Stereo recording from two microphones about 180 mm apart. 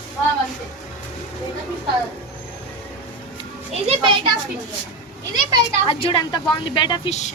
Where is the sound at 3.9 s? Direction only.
30° right (ahead or behind).